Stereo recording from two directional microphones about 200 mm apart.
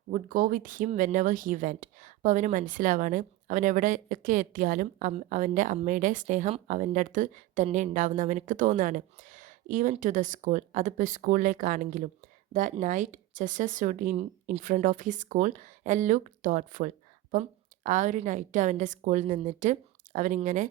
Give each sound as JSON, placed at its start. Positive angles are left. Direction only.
{"t": 0.1, "sound": "speech", "side_deg": -45}